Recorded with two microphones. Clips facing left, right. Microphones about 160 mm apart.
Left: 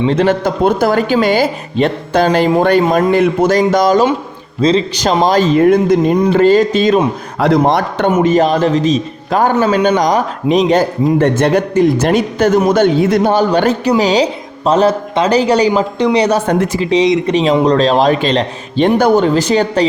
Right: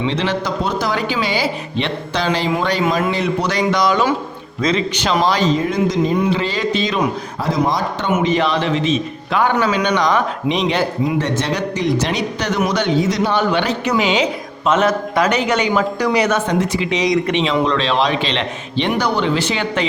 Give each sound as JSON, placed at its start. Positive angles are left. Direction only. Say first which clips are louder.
{"t": 0.0, "sound": "a man's voice", "louder": "left 7 dB", "side_deg": 45}
{"t": 5.5, "sound": "speech", "louder": "left 8 dB", "side_deg": 55}
{"t": 6.1, "sound": "a man's voice", "louder": "left 10 dB", "side_deg": 45}
{"t": 7.3, "sound": "speech", "louder": "left 9 dB", "side_deg": 70}
{"t": 8.1, "sound": "a man's voice", "louder": "left 5 dB", "side_deg": 45}
{"t": 13.3, "sound": "a man's voice", "louder": "left 6 dB", "side_deg": 40}
{"t": 16.5, "sound": "speech", "louder": "left 4 dB", "side_deg": 55}
{"t": 16.8, "sound": "a man's voice", "louder": "left 6 dB", "side_deg": 30}
{"t": 17.4, "sound": "a man's voice", "louder": "left 7 dB", "side_deg": 40}